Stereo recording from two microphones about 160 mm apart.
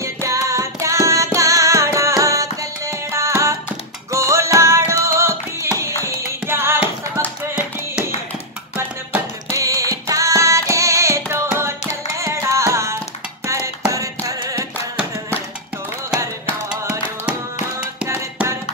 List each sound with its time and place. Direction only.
0.0 s music: 20° right (ahead or behind)
8.7 s music: 15° right (ahead or behind)
18.0 s music: 15° right (ahead or behind)